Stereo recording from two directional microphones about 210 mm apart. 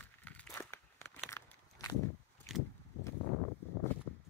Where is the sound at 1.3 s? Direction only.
15° left (ahead or behind).